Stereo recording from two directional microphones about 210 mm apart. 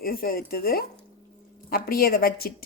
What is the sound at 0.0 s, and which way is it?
Speech, 45° left (ahead or behind).